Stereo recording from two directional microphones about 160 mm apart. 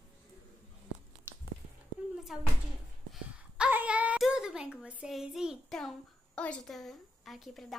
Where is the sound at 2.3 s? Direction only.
5° right (ahead or behind).